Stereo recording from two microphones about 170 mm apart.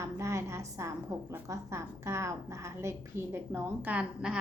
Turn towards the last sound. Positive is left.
turn(degrees=-5)  # may be behind; listen again after turning